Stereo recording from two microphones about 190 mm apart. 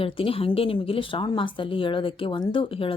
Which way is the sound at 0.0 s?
30° left (ahead or behind).